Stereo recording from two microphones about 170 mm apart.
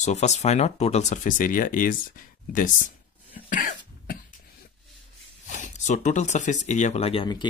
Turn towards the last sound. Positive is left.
turn(degrees=30)  # may be behind; listen again after turning